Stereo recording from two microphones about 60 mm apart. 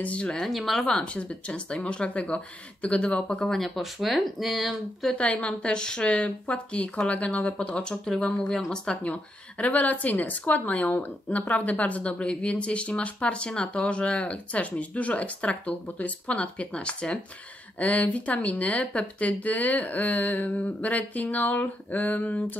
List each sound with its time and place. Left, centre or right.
0.0 s speech: centre
0.4 s speech: centre
5.1 s speech: centre
9.0 s speech: left